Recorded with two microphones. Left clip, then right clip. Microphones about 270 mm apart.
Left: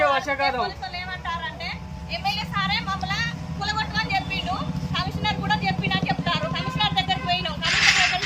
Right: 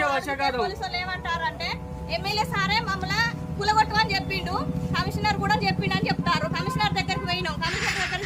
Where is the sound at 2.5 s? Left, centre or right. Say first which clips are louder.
Even; centre.